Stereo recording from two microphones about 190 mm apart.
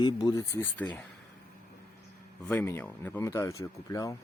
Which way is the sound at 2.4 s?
10° left (ahead or behind).